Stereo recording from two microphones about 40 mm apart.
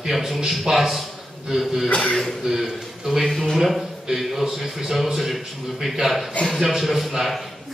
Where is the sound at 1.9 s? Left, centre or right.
Left.